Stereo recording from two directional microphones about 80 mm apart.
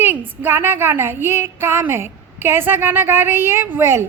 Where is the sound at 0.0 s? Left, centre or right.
Right.